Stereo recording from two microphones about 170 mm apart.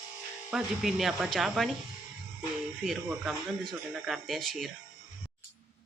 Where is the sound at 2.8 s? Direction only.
Centre (ahead or behind).